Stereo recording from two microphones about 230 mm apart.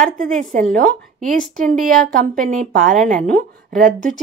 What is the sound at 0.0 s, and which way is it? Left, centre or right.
A woman's voice, right.